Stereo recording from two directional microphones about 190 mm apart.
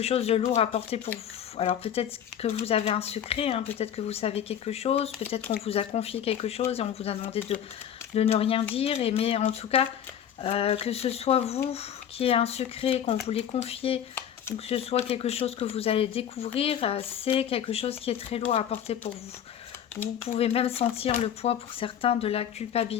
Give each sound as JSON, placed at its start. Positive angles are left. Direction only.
{"t": 0.0, "sound": "speech", "side_deg": 35}
{"t": 20.2, "sound": "speech", "side_deg": 30}